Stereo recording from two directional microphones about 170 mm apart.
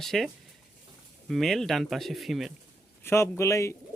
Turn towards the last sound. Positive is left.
turn(degrees=15)  # may be behind; listen again after turning